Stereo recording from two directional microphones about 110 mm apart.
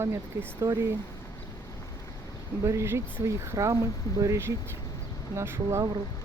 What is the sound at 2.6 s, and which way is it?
Speech, 25° right (ahead or behind).